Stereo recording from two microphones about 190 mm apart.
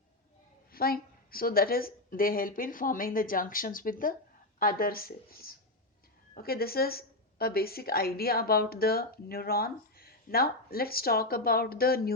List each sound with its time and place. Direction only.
0.7 s a woman's voice: 50° left (ahead or behind)